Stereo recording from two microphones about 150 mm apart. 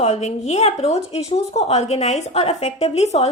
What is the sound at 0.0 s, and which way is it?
A woman's voice, 45° left (ahead or behind).